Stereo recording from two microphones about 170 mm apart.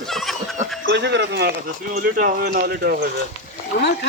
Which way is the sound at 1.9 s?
55° right (ahead or behind).